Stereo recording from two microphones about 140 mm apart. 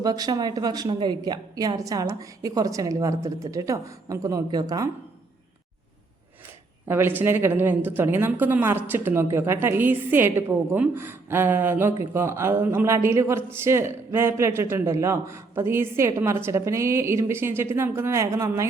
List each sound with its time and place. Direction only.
0.0 s a woman's voice: 25° right (ahead or behind)
6.8 s a woman's voice: 15° right (ahead or behind)